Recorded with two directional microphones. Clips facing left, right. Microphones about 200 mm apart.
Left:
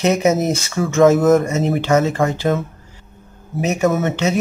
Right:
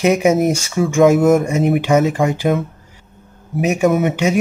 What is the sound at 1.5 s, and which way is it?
Speech, 15° right (ahead or behind).